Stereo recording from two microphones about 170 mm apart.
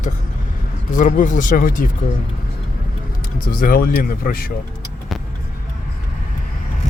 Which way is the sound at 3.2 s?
55° left (ahead or behind).